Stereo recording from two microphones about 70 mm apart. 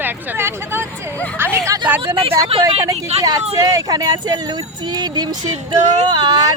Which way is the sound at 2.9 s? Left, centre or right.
Right.